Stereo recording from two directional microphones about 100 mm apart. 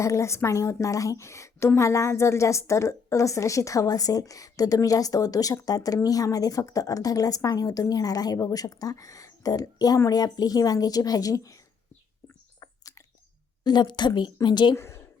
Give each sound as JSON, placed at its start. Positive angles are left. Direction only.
{"t": 0.0, "sound": "a woman's voice", "side_deg": 30}
{"t": 13.7, "sound": "a woman's voice", "side_deg": 50}
{"t": 14.8, "sound": "a sound", "side_deg": 25}